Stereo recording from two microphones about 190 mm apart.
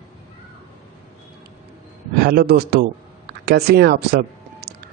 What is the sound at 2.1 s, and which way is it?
Speech, 55° right (ahead or behind).